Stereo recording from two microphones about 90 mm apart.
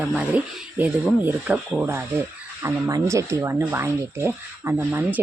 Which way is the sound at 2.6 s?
30° right (ahead or behind).